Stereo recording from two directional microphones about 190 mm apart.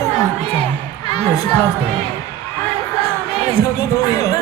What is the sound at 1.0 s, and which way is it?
Speech, 20° left (ahead or behind).